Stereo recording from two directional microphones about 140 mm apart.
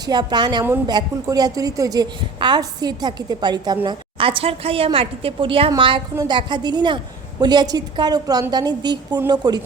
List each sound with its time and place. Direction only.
0.0 s a woman's voice: 30° right (ahead or behind)